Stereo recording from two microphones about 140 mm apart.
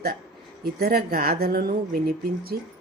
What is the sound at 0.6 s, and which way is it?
Speech, 90° right.